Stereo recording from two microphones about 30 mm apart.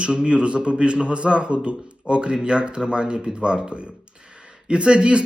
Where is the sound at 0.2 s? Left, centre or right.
Right.